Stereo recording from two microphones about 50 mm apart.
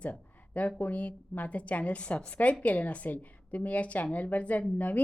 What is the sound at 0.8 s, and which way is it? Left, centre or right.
A woman's voice, left.